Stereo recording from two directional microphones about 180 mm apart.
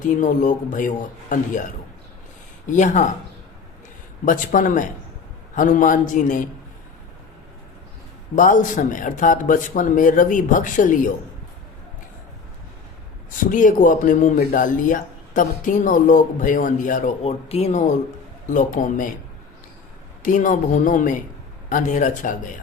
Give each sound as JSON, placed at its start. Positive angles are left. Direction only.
{"t": 0.0, "sound": "speech", "side_deg": 45}
{"t": 2.6, "sound": "speech", "side_deg": 45}
{"t": 4.3, "sound": "speech", "side_deg": 45}
{"t": 8.4, "sound": "speech", "side_deg": 45}
{"t": 13.4, "sound": "speech", "side_deg": 50}
{"t": 20.2, "sound": "speech", "side_deg": 45}